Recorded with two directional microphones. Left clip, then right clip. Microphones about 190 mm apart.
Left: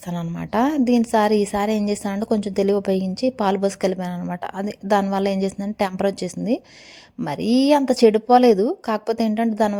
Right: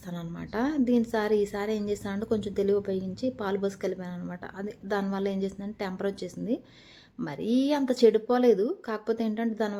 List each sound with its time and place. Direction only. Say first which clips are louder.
0.1 s a woman's voice: left 11 dB; 40° left (ahead or behind)